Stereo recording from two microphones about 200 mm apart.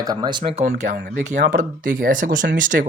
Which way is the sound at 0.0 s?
20° right (ahead or behind).